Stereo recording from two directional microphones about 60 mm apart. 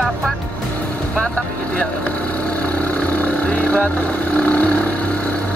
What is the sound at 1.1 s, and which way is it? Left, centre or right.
Vehicle, centre.